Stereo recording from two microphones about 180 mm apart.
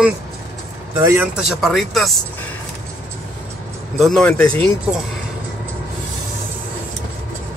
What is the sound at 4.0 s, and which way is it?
Speech, 5° left (ahead or behind).